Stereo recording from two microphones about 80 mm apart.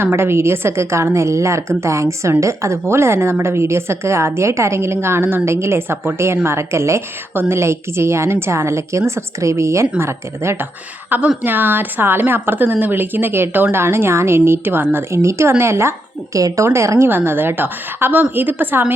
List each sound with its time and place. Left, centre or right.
0.0 s a woman's voice: right
11.1 s a woman's voice: right
17.1 s a woman's voice: right